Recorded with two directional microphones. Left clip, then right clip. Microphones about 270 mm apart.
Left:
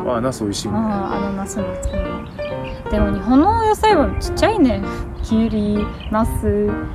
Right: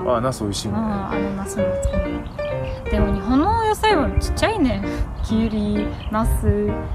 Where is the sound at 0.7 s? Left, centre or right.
Centre.